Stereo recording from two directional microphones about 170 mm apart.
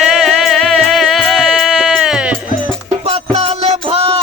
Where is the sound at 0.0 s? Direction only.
Centre (ahead or behind).